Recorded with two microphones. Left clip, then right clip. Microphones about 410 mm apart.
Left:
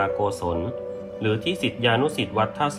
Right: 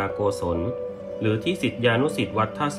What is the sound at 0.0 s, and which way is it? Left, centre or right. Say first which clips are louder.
Speech: left 1 dB; centre.